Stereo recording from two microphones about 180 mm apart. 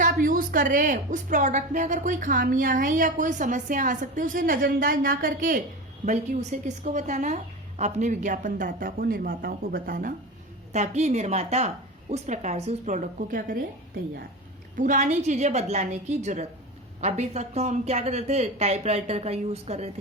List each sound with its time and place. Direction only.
0.0 s a woman's voice: 50° right (ahead or behind)
10.7 s speech: 35° right (ahead or behind)
14.8 s speech: 45° right (ahead or behind)